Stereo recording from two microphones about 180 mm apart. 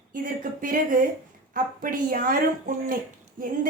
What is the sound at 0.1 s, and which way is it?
Speech, 50° right (ahead or behind).